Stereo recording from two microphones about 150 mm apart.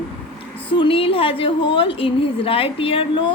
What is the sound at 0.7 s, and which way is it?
A woman's voice, 35° left (ahead or behind).